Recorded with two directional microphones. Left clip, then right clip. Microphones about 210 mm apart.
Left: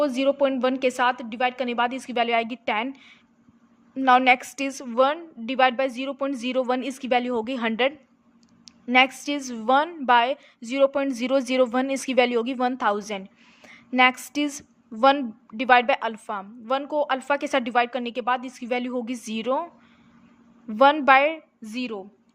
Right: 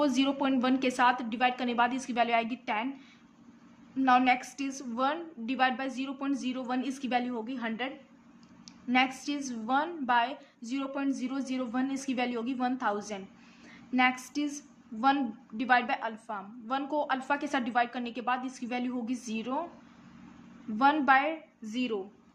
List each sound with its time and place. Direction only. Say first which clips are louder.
0.0 s a woman's voice: left 7 dB; 25° left (ahead or behind)
3.9 s a woman's voice: left 7 dB; 35° left (ahead or behind)
13.7 s a sound: left 8 dB; 40° left (ahead or behind)
15.0 s a woman's voice: left 8 dB; 35° left (ahead or behind)
20.7 s a woman's voice: left 8 dB; 35° left (ahead or behind)